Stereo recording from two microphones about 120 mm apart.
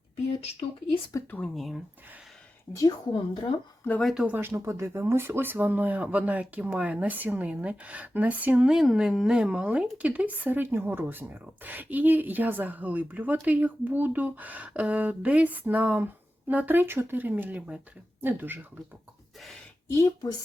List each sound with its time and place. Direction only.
1.1 s speech: 30° left (ahead or behind)
1.5 s speech: centre (ahead or behind)
2.7 s speech: 35° left (ahead or behind)
4.0 s speech: 5° right (ahead or behind)
4.4 s speech: 20° right (ahead or behind)
19.9 s speech: 25° left (ahead or behind)